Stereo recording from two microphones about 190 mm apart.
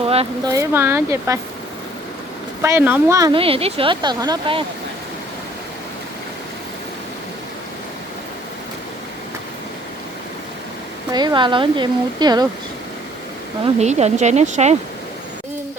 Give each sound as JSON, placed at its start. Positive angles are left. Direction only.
{"t": 0.0, "sound": "a sound", "side_deg": -30}
{"t": 0.4, "sound": "speech", "side_deg": -15}
{"t": 2.6, "sound": "speech", "side_deg": -15}
{"t": 11.1, "sound": "speech", "side_deg": -20}
{"t": 13.7, "sound": "speech", "side_deg": -35}